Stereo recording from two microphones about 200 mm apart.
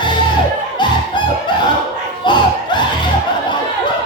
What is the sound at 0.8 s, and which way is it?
Chicken, 20° left (ahead or behind).